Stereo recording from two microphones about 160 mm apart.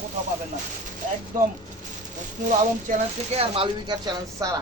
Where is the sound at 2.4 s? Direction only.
45° right (ahead or behind).